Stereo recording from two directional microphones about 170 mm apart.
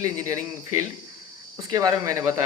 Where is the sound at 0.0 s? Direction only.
20° right (ahead or behind).